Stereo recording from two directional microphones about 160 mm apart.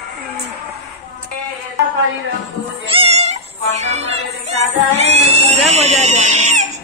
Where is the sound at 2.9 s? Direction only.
40° right (ahead or behind).